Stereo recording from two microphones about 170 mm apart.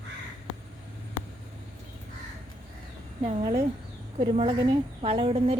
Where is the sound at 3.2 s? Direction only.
40° right (ahead or behind).